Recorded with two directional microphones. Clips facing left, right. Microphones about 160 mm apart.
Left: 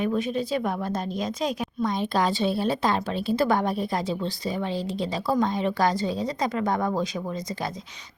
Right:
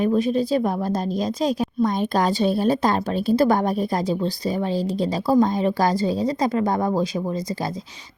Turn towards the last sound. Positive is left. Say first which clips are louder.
# right 5 dB
turn(degrees=-35)  # may be behind; listen again after turning